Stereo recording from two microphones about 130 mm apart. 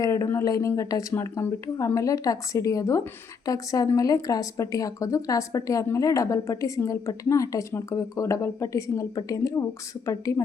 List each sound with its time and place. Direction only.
0.0 s speech: 25° left (ahead or behind)